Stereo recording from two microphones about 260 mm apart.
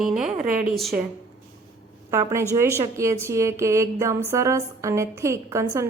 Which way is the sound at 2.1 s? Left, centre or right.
Centre.